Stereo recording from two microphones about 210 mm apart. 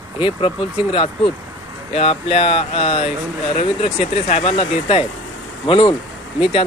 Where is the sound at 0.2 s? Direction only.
25° left (ahead or behind).